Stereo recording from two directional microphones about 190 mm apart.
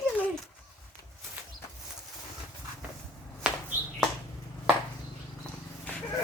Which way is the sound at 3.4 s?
5° right (ahead or behind).